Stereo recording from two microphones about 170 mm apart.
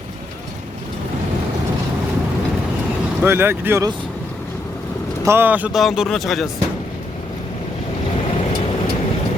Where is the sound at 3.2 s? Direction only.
15° right (ahead or behind).